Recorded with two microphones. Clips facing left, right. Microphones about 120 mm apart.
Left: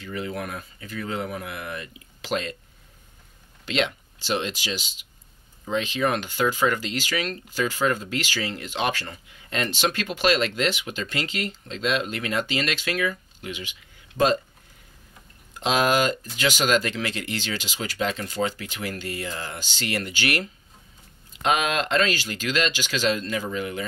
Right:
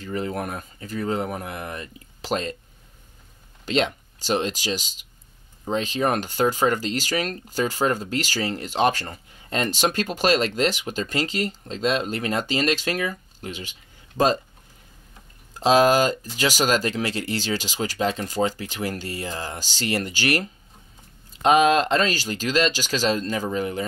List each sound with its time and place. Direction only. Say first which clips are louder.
0.0 s speech: right 3 dB; 40° right (ahead or behind)
3.6 s speech: right 3 dB; 40° right (ahead or behind)
15.5 s speech: right 5 dB; 35° right (ahead or behind)